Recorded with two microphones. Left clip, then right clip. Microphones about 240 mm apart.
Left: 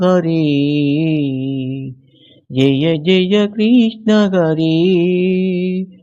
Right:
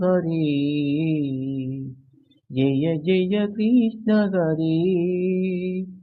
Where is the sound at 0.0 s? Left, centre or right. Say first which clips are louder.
Left 8 dB; left.